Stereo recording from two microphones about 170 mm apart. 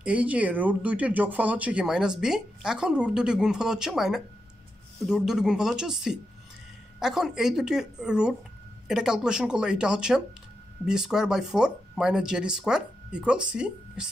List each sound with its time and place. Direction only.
0.0 s speech: 10° right (ahead or behind)